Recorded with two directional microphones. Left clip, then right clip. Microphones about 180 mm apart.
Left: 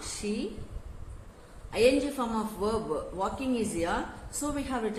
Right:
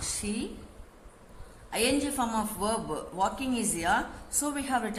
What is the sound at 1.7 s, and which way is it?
A woman's voice, 45° right (ahead or behind).